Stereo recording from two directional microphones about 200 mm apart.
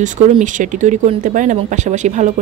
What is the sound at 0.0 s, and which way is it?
A woman's voice, 40° right (ahead or behind).